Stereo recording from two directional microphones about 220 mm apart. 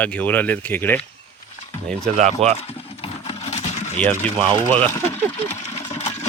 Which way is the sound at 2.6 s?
25° left (ahead or behind).